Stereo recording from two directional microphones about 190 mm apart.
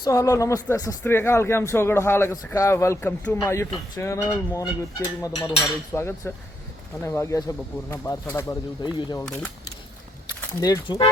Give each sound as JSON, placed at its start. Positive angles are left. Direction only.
{"t": 0.0, "sound": "speech", "side_deg": 15}
{"t": 5.4, "sound": "dishes", "side_deg": 0}
{"t": 5.9, "sound": "speech", "side_deg": 15}
{"t": 9.2, "sound": "dishes", "side_deg": 5}
{"t": 10.6, "sound": "speech", "side_deg": 20}